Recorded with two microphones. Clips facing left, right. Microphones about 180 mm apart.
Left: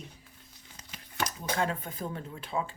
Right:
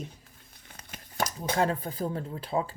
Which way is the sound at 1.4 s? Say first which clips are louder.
Right 5 dB; 35° right (ahead or behind).